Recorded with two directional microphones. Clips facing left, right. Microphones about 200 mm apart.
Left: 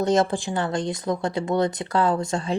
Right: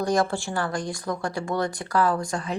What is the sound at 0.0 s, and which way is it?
Speech, 20° left (ahead or behind).